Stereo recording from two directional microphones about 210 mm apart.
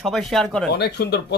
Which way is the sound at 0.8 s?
50° left (ahead or behind).